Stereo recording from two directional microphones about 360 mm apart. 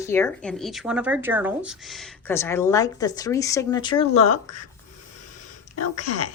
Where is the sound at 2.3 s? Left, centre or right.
Centre.